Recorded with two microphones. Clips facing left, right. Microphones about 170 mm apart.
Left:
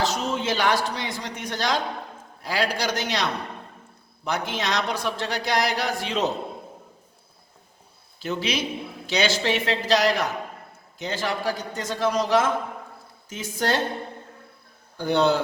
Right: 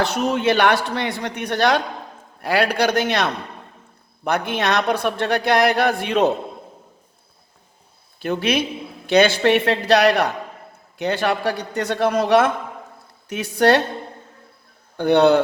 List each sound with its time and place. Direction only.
0.0 s a man's voice: 60° right (ahead or behind)
8.2 s a man's voice: 55° right (ahead or behind)
14.9 s a man's voice: 65° right (ahead or behind)